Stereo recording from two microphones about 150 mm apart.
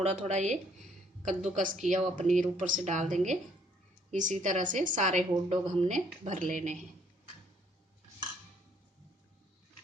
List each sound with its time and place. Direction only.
0.0 s a woman's voice: 50° right (ahead or behind)